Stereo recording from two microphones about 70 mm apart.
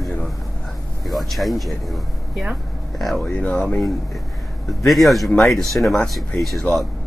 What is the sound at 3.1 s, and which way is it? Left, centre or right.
Speech, centre.